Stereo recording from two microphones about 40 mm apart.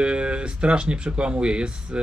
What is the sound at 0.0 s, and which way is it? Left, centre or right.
Speech, right.